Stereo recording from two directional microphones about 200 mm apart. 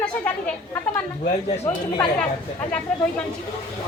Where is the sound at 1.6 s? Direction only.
5° left (ahead or behind).